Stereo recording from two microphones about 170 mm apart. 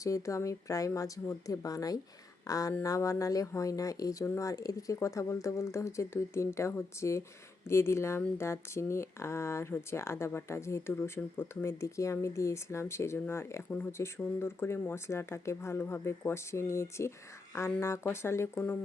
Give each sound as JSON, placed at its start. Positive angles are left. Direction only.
{"t": 0.0, "sound": "speech", "side_deg": 20}